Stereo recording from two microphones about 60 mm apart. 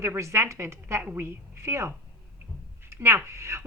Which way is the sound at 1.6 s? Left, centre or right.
Right.